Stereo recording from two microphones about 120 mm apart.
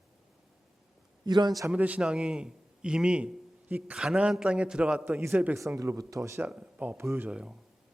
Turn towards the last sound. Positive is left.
turn(degrees=-10)  # may be behind; listen again after turning